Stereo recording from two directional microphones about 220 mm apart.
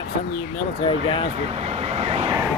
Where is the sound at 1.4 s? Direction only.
30° right (ahead or behind).